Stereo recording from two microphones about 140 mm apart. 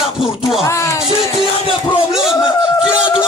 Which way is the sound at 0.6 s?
20° left (ahead or behind).